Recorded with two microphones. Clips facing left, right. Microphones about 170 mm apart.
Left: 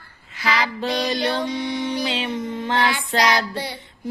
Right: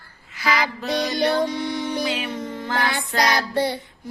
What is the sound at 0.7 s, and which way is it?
Child singing, 30° left (ahead or behind).